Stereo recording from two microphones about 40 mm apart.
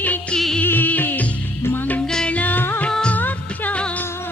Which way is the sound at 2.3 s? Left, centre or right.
Left.